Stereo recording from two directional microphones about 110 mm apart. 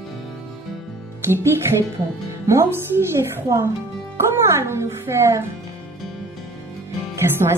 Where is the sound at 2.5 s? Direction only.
25° right (ahead or behind).